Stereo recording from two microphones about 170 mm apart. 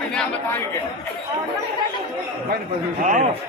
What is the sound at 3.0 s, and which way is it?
Speech, 45° right (ahead or behind).